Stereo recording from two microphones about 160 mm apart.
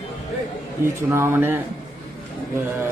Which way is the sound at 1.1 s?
15° right (ahead or behind).